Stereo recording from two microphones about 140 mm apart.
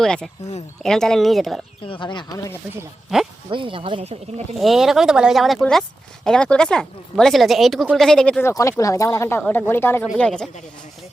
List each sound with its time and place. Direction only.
0.0 s speech: 5° left (ahead or behind)
1.9 s speech: 35° left (ahead or behind)
3.5 s speech: 35° right (ahead or behind)
4.5 s speech: centre (ahead or behind)
8.4 s speech: 20° left (ahead or behind); by 10.5 s 5° left (ahead or behind)